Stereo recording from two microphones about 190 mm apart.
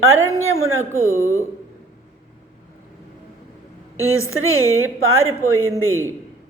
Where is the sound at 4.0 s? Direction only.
90° right.